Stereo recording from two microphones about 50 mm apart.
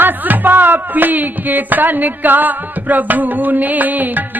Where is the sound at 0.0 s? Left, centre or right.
Right.